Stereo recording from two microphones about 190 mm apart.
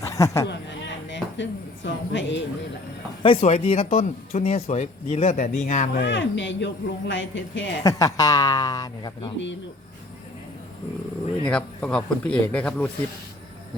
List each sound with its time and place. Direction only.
0.0 s a sound: 15° left (ahead or behind)
0.4 s a sound: 70° left (ahead or behind)
3.2 s speech: 35° left (ahead or behind)
6.1 s speech: 75° left (ahead or behind)
7.9 s speech: 15° left (ahead or behind)
11.4 s speech: 5° left (ahead or behind)